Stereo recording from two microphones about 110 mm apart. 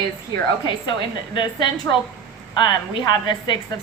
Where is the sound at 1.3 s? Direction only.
45° left (ahead or behind).